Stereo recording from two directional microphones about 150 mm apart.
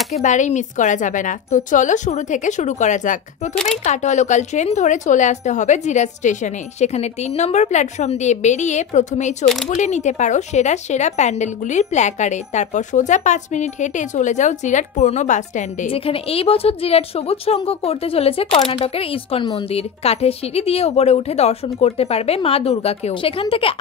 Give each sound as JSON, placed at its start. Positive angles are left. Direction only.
{"t": 0.1, "sound": "a woman's voice", "side_deg": 55}
{"t": 3.5, "sound": "speech", "side_deg": 5}
{"t": 3.8, "sound": "speech", "side_deg": 50}
{"t": 15.9, "sound": "a woman's voice", "side_deg": 40}